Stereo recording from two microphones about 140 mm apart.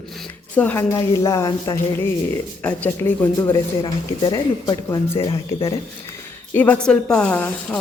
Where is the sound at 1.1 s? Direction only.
20° left (ahead or behind).